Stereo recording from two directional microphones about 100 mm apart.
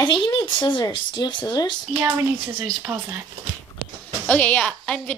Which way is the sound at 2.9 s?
25° right (ahead or behind).